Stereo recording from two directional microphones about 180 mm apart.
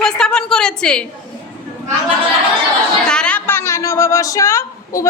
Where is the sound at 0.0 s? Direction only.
5° left (ahead or behind).